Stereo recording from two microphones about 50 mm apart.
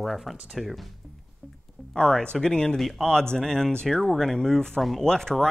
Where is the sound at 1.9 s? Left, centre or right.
Centre.